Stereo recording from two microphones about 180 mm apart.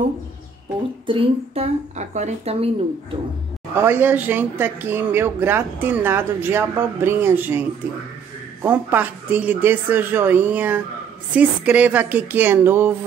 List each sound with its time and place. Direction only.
1.0 s speech: 30° right (ahead or behind)
3.7 s speech: 10° right (ahead or behind)
8.6 s speech: 10° right (ahead or behind)